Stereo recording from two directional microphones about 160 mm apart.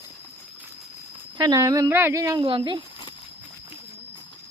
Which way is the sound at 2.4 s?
35° right (ahead or behind).